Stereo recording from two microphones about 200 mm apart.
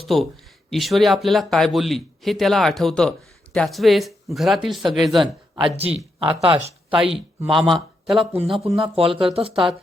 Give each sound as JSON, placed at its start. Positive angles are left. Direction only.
{"t": 0.0, "sound": "speech", "side_deg": 0}
{"t": 5.2, "sound": "speech", "side_deg": -25}
{"t": 6.9, "sound": "speech", "side_deg": -5}
{"t": 8.1, "sound": "speech", "side_deg": -30}